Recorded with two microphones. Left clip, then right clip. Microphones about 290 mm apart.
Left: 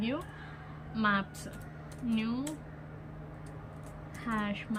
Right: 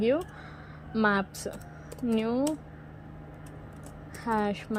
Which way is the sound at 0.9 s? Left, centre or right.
Centre.